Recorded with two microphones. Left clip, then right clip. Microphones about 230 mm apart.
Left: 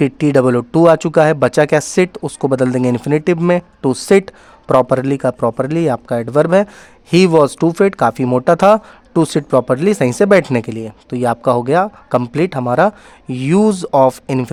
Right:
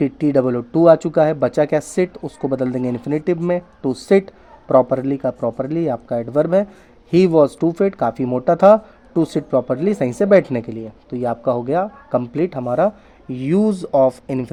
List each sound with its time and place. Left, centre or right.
0.0 s speech: left